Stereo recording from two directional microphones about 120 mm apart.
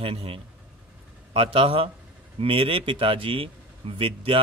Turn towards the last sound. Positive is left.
turn(degrees=-45)  # may be behind; listen again after turning